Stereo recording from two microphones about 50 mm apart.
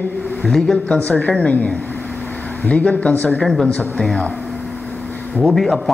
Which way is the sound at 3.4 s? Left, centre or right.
Centre.